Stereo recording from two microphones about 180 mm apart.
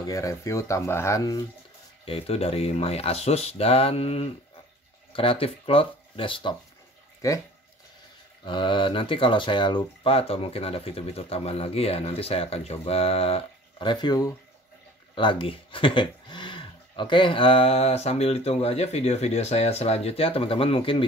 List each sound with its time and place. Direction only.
0.0 s speech: 20° left (ahead or behind)
2.0 s speech: 30° left (ahead or behind)
7.2 s speech: 20° left (ahead or behind)
8.5 s speech: 25° left (ahead or behind)